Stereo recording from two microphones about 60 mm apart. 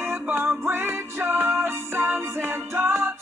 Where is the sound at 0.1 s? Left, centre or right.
Right.